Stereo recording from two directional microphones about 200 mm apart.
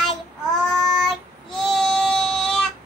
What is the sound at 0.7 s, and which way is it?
Child singing, centre (ahead or behind).